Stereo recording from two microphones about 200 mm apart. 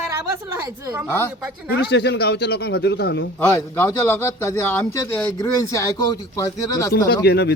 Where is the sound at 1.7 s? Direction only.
55° left (ahead or behind).